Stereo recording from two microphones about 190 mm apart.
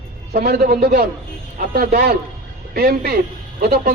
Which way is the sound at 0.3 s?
55° right (ahead or behind).